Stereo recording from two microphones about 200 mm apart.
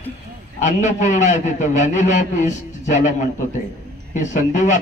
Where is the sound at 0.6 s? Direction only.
40° left (ahead or behind).